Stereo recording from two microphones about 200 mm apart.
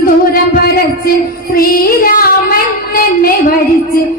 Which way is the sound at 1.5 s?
45° left (ahead or behind).